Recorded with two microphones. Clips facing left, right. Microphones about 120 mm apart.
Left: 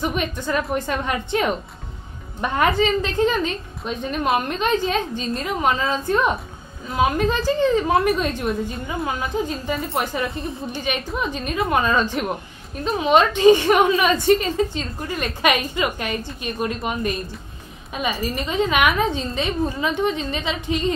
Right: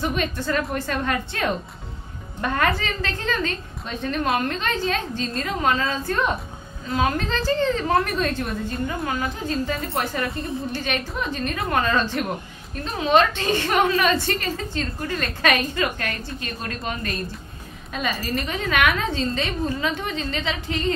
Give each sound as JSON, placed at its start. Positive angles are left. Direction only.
{"t": 0.0, "sound": "a woman's voice", "side_deg": 15}